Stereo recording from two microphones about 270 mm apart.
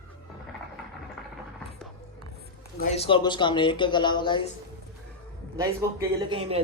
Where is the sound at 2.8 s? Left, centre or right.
Centre.